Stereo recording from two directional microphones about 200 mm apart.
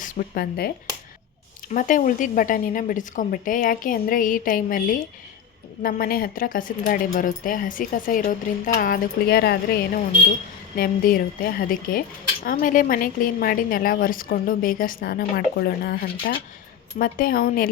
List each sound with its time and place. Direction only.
0.0 s speech: 45° left (ahead or behind)
1.7 s a woman's voice: 40° left (ahead or behind)